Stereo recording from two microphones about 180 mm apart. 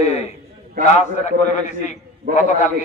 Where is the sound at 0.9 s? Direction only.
40° left (ahead or behind).